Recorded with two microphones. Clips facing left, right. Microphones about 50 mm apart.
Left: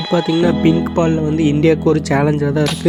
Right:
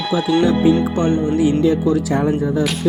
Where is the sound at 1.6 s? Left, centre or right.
Left.